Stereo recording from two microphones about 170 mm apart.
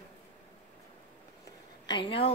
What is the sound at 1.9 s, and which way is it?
Speech, 30° left (ahead or behind).